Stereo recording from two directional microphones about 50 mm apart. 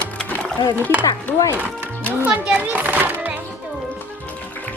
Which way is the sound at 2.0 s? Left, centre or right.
Right.